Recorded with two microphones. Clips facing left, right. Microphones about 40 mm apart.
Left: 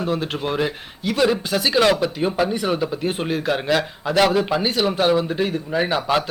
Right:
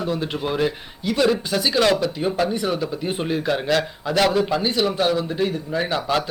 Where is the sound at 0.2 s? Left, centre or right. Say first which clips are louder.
Even; centre.